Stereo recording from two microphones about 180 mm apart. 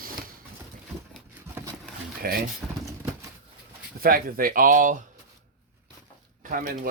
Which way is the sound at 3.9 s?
55° right (ahead or behind).